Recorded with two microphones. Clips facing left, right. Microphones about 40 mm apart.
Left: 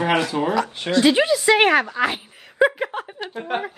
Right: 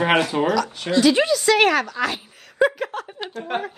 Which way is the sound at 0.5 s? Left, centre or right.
Left.